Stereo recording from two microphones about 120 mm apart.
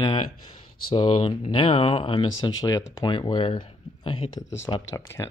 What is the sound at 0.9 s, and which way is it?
Speech, 40° left (ahead or behind).